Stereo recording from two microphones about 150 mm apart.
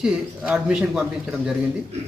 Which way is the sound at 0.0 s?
5° right (ahead or behind).